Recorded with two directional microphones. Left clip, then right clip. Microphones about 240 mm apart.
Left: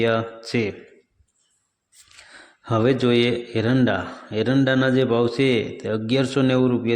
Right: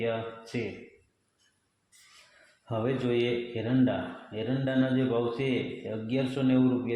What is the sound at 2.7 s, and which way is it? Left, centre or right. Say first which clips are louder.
A man's voice: left 10 dB; left.